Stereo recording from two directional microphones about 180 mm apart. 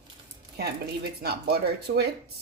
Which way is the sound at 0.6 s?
60° right (ahead or behind).